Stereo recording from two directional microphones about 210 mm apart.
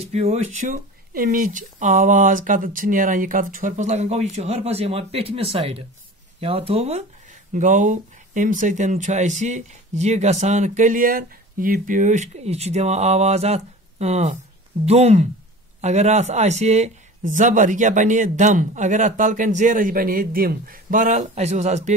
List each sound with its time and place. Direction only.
0.0 s speech: 30° right (ahead or behind)